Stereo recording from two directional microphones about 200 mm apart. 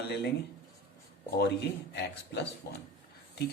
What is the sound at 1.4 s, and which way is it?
Speech, 60° left (ahead or behind).